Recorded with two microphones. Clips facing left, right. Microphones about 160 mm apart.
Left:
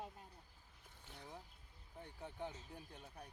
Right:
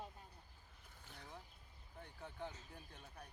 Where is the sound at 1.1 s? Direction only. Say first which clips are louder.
Left 2 dB; 15° left (ahead or behind).